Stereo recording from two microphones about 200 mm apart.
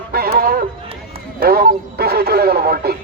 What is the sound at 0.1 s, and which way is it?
Run, 50° right (ahead or behind).